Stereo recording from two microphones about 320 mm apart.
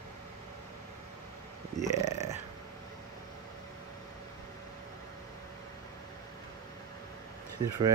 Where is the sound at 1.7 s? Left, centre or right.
Left.